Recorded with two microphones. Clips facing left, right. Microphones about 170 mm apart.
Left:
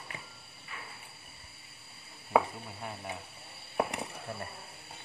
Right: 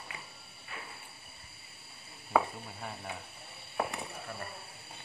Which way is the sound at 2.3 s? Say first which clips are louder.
Left 2 dB; 10° left (ahead or behind).